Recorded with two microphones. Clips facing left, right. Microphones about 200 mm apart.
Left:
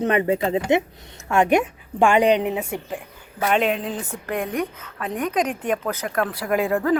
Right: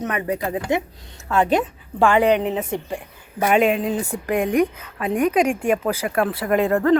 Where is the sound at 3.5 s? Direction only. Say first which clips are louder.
Right 4 dB; 5° right (ahead or behind).